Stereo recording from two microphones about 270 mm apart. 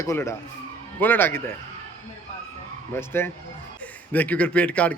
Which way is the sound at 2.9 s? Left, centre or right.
Centre.